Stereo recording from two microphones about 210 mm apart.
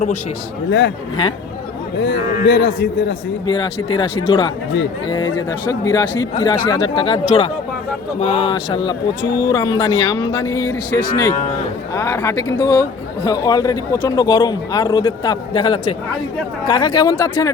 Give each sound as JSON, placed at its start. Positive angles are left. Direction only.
{"t": 0.7, "sound": "speech", "side_deg": 55}
{"t": 2.0, "sound": "speech", "side_deg": 60}
{"t": 3.4, "sound": "speech", "side_deg": 20}
{"t": 8.2, "sound": "speech", "side_deg": 25}